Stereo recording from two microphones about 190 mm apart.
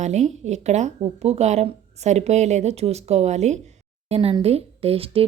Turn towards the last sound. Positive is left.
turn(degrees=-30)  # may be behind; listen again after turning